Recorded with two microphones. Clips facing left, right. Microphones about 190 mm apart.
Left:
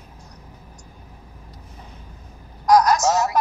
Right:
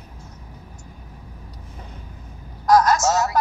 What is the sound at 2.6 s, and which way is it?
Speech, 15° left (ahead or behind).